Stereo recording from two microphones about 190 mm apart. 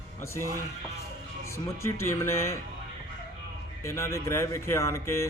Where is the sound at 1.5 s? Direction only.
15° left (ahead or behind).